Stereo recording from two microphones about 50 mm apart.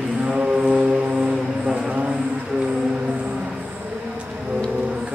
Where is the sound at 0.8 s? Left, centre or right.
Centre.